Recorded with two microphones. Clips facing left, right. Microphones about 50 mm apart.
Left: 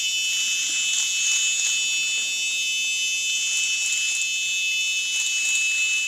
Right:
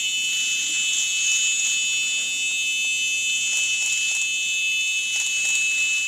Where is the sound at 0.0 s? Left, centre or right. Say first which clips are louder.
Right 1 dB; centre.